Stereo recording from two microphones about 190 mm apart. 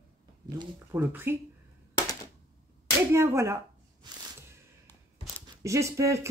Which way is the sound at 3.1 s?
15° right (ahead or behind).